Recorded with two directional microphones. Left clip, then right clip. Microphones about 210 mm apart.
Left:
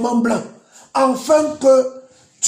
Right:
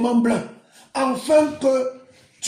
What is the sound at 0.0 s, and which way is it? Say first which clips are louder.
Speech: left 2 dB; 30° left (ahead or behind).